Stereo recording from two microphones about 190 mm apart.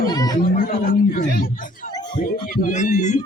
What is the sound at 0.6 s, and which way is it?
Speech, 45° left (ahead or behind).